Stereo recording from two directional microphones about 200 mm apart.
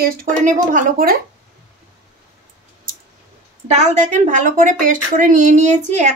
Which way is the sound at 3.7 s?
35° right (ahead or behind).